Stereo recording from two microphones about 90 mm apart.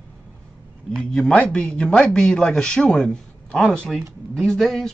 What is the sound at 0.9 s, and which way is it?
Speech, 10° left (ahead or behind).